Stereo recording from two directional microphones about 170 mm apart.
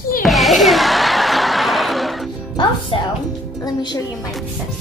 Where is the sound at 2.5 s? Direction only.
25° left (ahead or behind).